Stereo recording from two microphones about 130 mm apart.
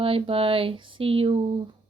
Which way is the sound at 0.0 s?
45° right (ahead or behind).